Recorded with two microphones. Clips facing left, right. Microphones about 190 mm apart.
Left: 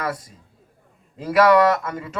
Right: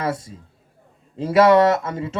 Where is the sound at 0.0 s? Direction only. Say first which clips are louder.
Right 3 dB; 25° right (ahead or behind).